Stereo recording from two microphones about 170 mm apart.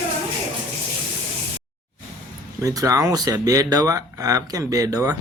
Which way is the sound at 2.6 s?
20° right (ahead or behind).